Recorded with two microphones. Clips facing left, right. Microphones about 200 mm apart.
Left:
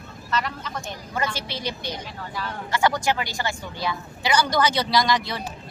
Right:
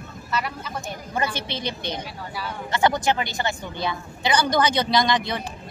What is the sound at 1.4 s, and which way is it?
Speech, 20° right (ahead or behind).